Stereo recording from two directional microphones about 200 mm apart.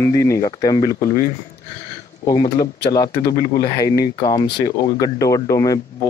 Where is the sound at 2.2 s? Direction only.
20° left (ahead or behind).